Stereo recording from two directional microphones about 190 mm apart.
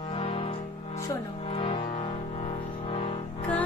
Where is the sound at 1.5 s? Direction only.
30° left (ahead or behind).